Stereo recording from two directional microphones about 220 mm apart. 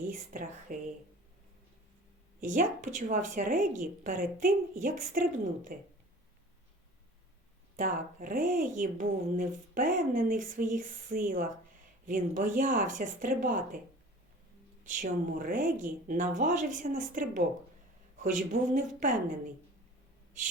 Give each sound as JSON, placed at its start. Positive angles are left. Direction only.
{"t": 0.1, "sound": "speech", "side_deg": -40}
{"t": 2.4, "sound": "speech", "side_deg": -35}
{"t": 7.8, "sound": "speech", "side_deg": -40}
{"t": 14.8, "sound": "speech", "side_deg": -35}